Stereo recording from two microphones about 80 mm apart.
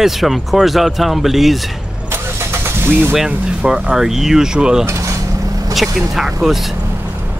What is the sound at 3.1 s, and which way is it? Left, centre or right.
Speech, centre.